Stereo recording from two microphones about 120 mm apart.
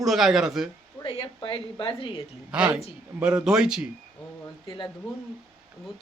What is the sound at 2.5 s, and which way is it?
Speech, 10° right (ahead or behind).